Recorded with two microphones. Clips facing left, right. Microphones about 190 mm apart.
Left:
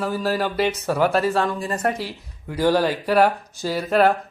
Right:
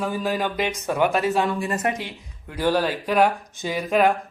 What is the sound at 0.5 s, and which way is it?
Speech, 15° right (ahead or behind).